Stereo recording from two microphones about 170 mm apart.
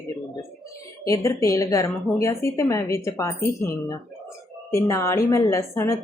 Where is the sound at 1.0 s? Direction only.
20° left (ahead or behind).